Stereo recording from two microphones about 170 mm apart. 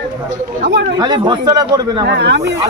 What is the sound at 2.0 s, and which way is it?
Speech, 80° right.